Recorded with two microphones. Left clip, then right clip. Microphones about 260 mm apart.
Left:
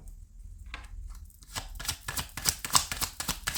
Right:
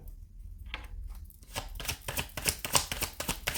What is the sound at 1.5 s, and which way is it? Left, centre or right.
Chopping, centre.